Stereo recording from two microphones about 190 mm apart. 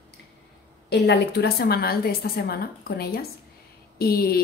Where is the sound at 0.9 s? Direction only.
65° left (ahead or behind).